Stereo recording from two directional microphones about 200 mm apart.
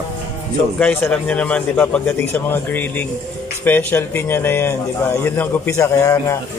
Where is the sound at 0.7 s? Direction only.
5° left (ahead or behind).